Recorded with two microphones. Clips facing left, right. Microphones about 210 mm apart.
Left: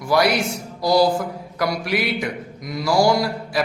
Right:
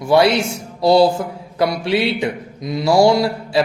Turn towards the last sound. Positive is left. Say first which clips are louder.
# right 4 dB
turn(degrees=-25)  # may be behind; listen again after turning